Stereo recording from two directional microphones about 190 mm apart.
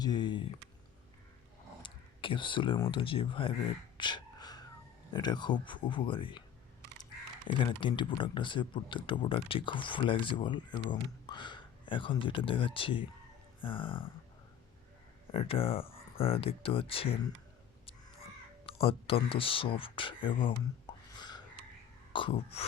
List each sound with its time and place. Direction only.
0.0 s speech: 20° left (ahead or behind)
1.8 s speech: 25° left (ahead or behind)
3.9 s beatboxing: 25° left (ahead or behind)
5.1 s speech: 20° left (ahead or behind)
15.3 s speech: 30° left (ahead or behind)
18.6 s speech: 30° left (ahead or behind)
21.2 s a sound: 20° left (ahead or behind)
22.1 s speech: 25° left (ahead or behind)